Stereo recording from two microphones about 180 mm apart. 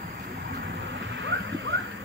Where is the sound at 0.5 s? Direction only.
75° right (ahead or behind).